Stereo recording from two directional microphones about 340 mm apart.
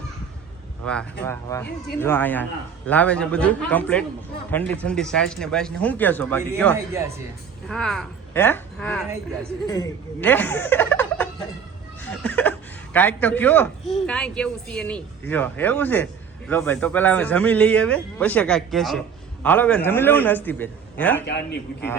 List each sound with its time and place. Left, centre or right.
0.8 s a man's voice: centre
7.7 s a man's voice: centre
21.2 s a man's voice: left